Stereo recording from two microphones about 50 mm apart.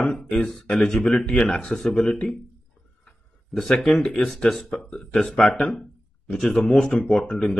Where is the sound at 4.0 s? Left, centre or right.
Centre.